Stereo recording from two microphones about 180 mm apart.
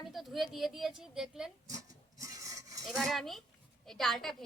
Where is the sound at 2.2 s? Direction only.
20° right (ahead or behind).